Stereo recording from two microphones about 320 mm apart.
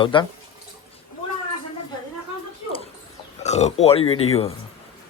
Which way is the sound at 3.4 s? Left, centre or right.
Left.